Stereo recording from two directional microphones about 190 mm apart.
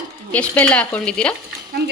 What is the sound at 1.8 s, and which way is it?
Speech, 60° right (ahead or behind).